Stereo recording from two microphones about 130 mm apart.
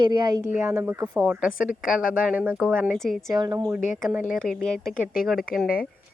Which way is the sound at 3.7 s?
10° right (ahead or behind).